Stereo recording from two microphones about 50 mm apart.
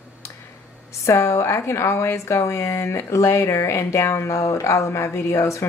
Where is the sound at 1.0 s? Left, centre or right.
Left.